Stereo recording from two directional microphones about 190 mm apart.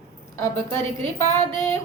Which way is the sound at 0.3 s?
15° left (ahead or behind).